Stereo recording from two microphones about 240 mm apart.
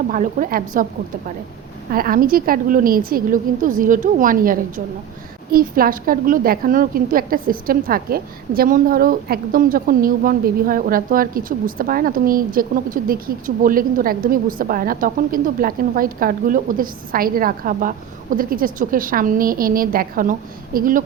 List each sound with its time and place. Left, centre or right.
0.1 s a woman's voice: right
1.9 s a woman's voice: right